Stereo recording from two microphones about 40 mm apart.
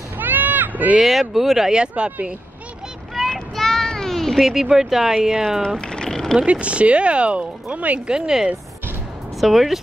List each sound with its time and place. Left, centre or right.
0.2 s a sound: right
0.9 s speech: centre
1.7 s speech: right
3.2 s child singing: centre
3.9 s cat: centre
4.4 s speech: centre
5.8 s vehicle: centre
6.4 s speech: right
8.1 s speech: centre
9.4 s speech: centre